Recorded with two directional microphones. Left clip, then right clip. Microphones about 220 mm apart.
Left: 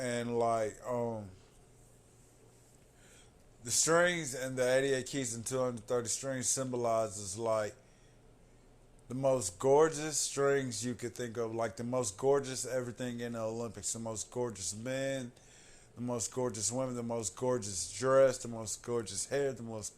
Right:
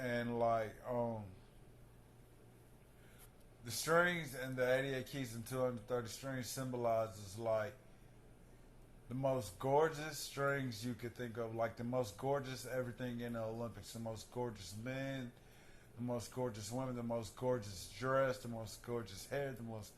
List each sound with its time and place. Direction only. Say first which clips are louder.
0.0 s a sound: left 5 dB; 45° left (ahead or behind)
3.6 s speech: left 6 dB; 45° left (ahead or behind)
9.0 s speech: left 7 dB; 45° left (ahead or behind)